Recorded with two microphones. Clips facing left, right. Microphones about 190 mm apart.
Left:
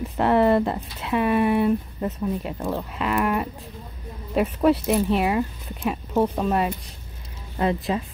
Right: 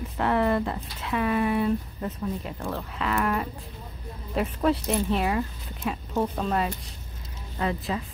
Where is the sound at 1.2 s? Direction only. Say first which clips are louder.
Left 4 dB; 15° left (ahead or behind).